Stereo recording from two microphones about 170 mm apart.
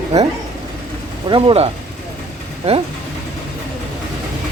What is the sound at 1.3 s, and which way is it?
Speech, 30° right (ahead or behind).